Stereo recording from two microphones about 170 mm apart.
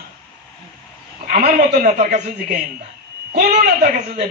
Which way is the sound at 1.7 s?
45° right (ahead or behind).